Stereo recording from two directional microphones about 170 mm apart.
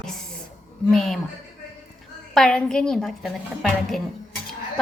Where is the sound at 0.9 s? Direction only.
Centre (ahead or behind).